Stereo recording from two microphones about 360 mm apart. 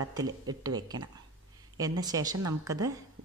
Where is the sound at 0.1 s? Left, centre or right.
Centre.